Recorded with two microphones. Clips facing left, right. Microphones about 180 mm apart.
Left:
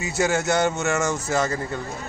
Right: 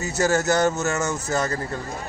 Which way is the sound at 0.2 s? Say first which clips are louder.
Right 1 dB; centre (ahead or behind).